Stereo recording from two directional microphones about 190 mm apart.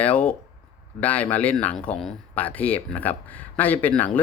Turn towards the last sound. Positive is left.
turn(degrees=10)  # may be behind; listen again after turning